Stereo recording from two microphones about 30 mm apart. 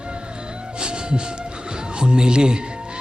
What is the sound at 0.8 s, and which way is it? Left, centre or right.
Music, right.